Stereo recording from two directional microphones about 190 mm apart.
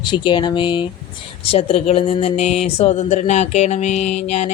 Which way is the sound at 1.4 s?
30° left (ahead or behind).